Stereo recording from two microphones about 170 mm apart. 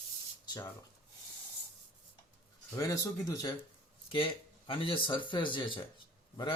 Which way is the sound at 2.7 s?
20° left (ahead or behind).